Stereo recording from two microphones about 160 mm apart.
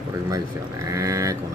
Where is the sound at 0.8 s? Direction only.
20° right (ahead or behind).